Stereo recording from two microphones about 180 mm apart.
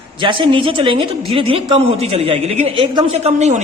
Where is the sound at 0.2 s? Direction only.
30° right (ahead or behind).